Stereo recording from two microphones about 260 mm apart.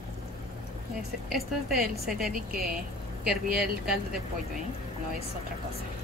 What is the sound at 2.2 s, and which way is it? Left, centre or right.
Speech, right.